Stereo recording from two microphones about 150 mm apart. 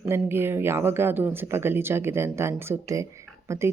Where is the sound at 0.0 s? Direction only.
15° right (ahead or behind).